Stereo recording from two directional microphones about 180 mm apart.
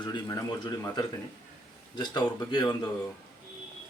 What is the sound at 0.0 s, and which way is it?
Speech, 20° left (ahead or behind).